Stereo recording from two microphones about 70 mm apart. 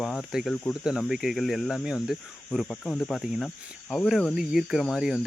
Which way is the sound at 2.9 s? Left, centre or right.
Centre.